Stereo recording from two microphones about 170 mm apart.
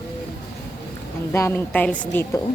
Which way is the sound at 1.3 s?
15° left (ahead or behind).